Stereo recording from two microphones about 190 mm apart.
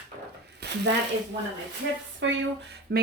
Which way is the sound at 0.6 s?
65° right (ahead or behind).